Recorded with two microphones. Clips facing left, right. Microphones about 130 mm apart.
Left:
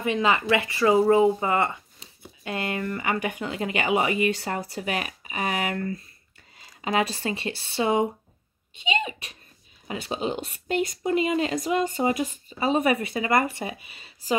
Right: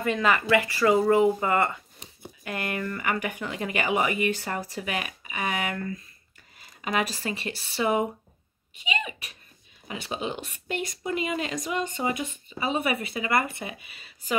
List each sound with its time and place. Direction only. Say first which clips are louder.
0.0 s speech: left 1 dB; 20° left (ahead or behind)